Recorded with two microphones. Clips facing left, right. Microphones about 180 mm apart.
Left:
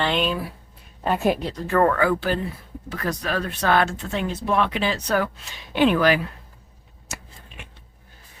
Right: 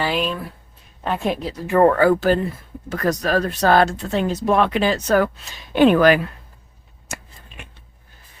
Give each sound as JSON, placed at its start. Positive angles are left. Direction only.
{"t": 0.0, "sound": "speech", "side_deg": -5}
{"t": 1.6, "sound": "speech", "side_deg": -15}
{"t": 1.9, "sound": "speech", "side_deg": -40}